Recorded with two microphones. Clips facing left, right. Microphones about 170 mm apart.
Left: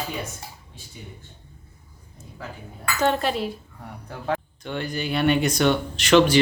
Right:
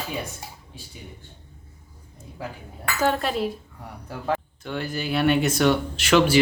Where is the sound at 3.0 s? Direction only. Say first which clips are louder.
Left 1 dB; centre (ahead or behind).